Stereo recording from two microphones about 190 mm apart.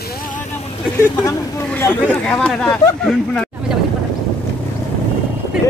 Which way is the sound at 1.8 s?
5° left (ahead or behind).